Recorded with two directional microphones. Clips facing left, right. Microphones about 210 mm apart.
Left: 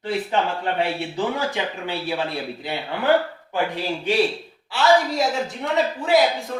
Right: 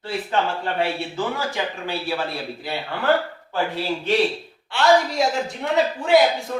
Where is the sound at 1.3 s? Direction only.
20° left (ahead or behind).